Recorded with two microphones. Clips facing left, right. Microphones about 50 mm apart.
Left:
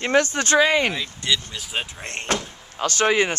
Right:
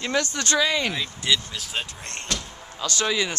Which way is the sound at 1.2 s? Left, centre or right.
Centre.